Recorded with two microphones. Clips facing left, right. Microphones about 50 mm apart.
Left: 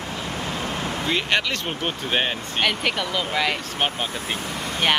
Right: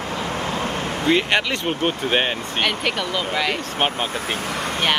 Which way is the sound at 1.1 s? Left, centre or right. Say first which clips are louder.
Right 4 dB; centre.